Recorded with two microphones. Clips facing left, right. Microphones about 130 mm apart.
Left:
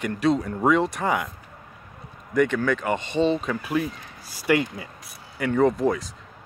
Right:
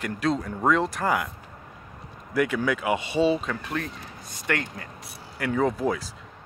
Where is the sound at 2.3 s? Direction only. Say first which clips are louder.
Left 3 dB; 5° right (ahead or behind).